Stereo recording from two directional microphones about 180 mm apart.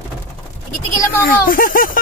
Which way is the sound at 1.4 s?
50° left (ahead or behind).